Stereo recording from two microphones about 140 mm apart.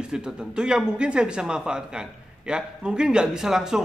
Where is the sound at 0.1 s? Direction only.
5° right (ahead or behind).